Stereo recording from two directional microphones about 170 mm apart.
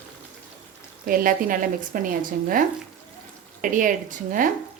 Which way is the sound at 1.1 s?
55° right (ahead or behind).